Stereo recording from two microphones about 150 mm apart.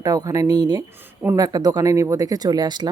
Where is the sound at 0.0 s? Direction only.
25° right (ahead or behind).